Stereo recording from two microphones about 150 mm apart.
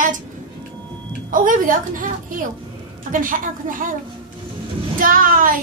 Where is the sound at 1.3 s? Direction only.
65° right (ahead or behind).